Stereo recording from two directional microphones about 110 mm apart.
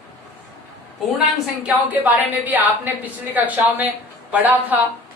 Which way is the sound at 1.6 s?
15° right (ahead or behind).